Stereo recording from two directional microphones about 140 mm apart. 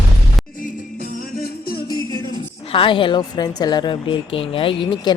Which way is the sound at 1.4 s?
90° left.